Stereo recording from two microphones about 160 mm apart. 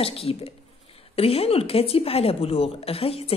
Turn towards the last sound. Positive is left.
turn(degrees=35)  # may be behind; listen again after turning